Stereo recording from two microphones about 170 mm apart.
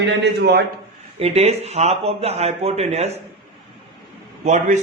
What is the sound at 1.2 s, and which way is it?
Speech, 40° right (ahead or behind).